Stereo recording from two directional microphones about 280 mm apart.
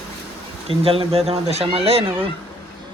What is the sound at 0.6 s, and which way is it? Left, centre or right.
Speech, centre.